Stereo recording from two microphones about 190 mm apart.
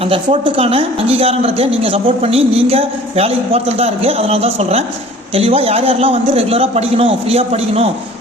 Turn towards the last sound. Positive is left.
turn(degrees=-35)  # may be behind; listen again after turning